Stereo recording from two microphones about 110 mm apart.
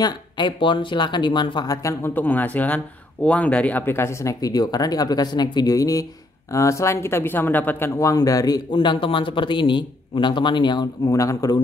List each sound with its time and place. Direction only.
0.0 s a man's voice: 45° left (ahead or behind)
1.8 s speech: 30° left (ahead or behind)
2.1 s speech: 15° left (ahead or behind)
8.0 s speech: 30° left (ahead or behind)
8.7 s a man's voice: 50° left (ahead or behind)
11.1 s speech: 30° left (ahead or behind)